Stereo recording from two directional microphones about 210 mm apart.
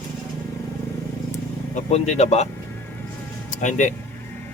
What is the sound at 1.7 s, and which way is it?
Speech, 30° left (ahead or behind).